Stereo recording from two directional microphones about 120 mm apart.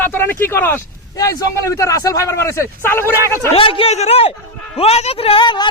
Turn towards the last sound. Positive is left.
turn(degrees=40)  # may be behind; listen again after turning